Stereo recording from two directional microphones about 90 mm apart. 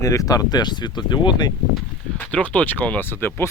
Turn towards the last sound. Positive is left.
turn(degrees=20)  # may be behind; listen again after turning